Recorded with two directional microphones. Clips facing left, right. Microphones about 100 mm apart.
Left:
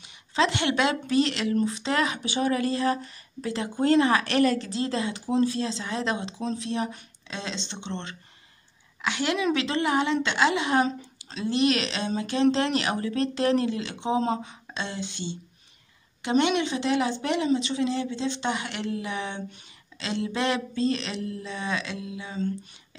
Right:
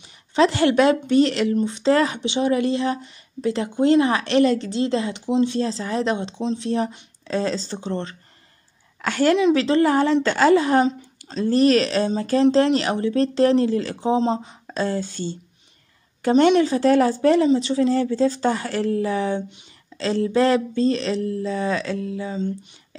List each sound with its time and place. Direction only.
0.3 s a woman's voice: 35° right (ahead or behind)
9.4 s speech: 35° right (ahead or behind)